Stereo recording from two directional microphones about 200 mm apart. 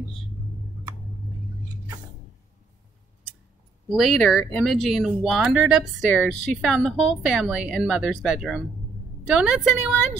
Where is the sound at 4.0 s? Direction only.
5° left (ahead or behind).